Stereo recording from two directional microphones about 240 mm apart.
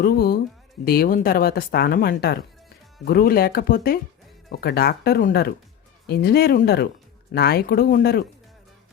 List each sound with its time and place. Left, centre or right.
0.0 s speech: left